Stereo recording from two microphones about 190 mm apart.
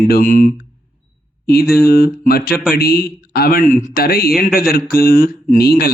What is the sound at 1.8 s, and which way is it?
Speech, 50° left (ahead or behind).